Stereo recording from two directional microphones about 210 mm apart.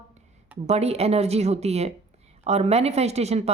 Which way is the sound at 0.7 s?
30° right (ahead or behind).